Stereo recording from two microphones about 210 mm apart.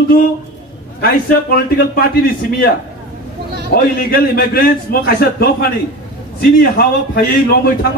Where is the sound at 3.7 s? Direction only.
45° left (ahead or behind).